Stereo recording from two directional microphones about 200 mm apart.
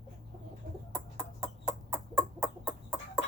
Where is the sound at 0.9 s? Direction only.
5° right (ahead or behind).